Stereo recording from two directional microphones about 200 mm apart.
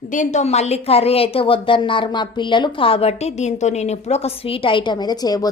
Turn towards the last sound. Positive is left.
turn(degrees=20)  # may be behind; listen again after turning